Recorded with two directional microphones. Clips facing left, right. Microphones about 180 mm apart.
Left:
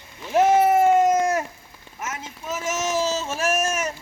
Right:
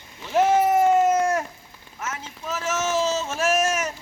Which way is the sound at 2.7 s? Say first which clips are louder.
Right 1 dB; 15° left (ahead or behind).